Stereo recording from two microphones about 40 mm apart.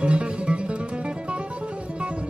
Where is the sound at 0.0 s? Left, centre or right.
Right.